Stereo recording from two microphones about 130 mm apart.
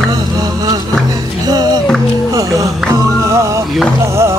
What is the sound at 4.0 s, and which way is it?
Speech, 20° right (ahead or behind).